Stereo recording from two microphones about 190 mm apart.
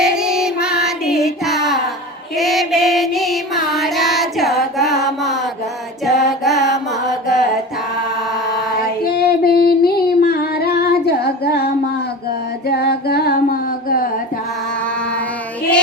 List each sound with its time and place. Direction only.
0.0 s music: 5° right (ahead or behind)
9.0 s female singing: 50° left (ahead or behind)
12.6 s a sound: 55° left (ahead or behind)